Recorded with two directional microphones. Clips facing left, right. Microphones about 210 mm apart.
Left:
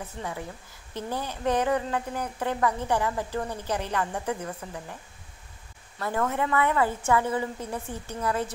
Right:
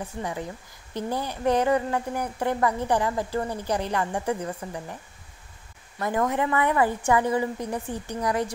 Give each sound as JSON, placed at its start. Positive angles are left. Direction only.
{"t": 0.0, "sound": "speech", "side_deg": -15}
{"t": 5.9, "sound": "speech", "side_deg": -15}